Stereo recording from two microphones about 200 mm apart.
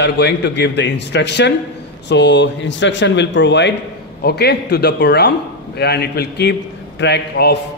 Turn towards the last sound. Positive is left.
turn(degrees=55)  # may be behind; listen again after turning